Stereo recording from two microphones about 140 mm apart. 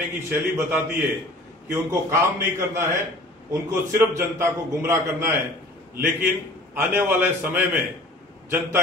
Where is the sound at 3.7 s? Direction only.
20° right (ahead or behind).